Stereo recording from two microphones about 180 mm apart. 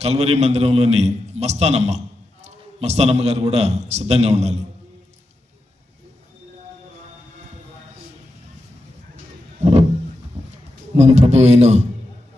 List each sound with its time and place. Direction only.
0.0 s a man's voice: 35° right (ahead or behind)
10.9 s a man's voice: 35° right (ahead or behind)